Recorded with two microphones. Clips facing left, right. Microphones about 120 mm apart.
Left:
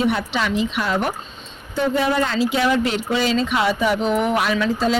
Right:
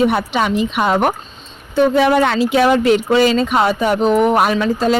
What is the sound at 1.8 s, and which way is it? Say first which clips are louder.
Speech: right 7 dB; 70° right (ahead or behind).